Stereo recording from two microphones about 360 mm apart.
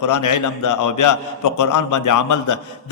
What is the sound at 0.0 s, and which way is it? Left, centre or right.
A man's voice, left.